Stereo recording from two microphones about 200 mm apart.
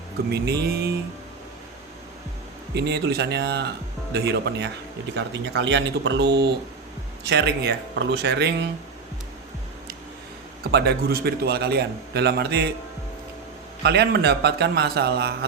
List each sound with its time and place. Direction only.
0.3 s a man's voice: 55° right (ahead or behind)
2.7 s speech: 55° right (ahead or behind)
10.6 s a man's voice: 55° right (ahead or behind)
13.8 s speech: 55° right (ahead or behind)